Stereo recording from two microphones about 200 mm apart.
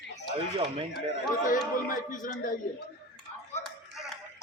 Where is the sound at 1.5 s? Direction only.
40° left (ahead or behind).